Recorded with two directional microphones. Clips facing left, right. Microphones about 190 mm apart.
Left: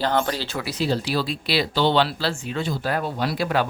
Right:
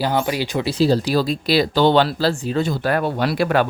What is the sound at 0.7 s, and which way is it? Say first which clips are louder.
Speech: right 7 dB; 35° right (ahead or behind).